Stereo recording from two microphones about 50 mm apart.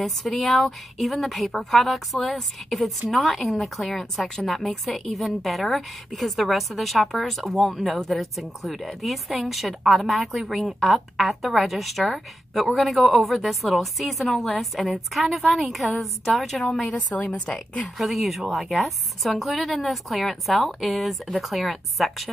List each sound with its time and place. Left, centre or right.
0.0 s a woman's voice: centre
16.9 s a woman's voice: left
17.8 s a woman's voice: centre